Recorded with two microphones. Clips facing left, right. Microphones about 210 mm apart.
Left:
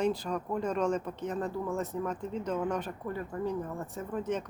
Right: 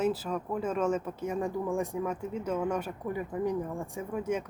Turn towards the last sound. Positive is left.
turn(degrees=-10)  # may be behind; listen again after turning